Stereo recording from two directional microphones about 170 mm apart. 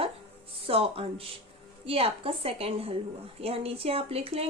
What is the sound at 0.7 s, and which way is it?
Speech, 35° right (ahead or behind).